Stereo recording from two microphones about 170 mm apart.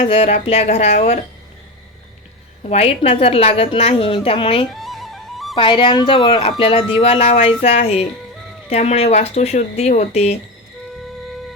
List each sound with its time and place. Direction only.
0.0 s a woman's voice: 35° left (ahead or behind)
2.6 s a woman's voice: 35° left (ahead or behind)
4.7 s music: centre (ahead or behind)
5.5 s a woman's voice: 30° left (ahead or behind)